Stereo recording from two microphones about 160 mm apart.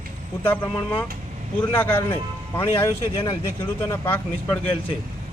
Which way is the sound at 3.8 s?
15° left (ahead or behind).